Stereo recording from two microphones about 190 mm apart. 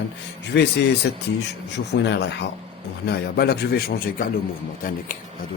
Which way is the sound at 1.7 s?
65° left (ahead or behind).